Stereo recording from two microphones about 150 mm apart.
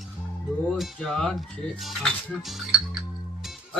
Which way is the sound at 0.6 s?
Centre (ahead or behind).